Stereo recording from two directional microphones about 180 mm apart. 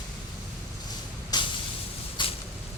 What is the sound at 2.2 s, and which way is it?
Vehicle, 25° left (ahead or behind).